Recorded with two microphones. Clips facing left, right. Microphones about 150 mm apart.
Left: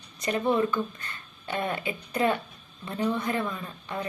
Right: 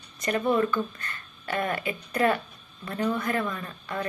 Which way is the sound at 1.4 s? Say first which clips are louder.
Right 1 dB; 15° left (ahead or behind).